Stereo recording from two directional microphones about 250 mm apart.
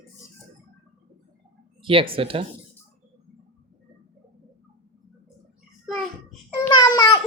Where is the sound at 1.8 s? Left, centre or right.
Right.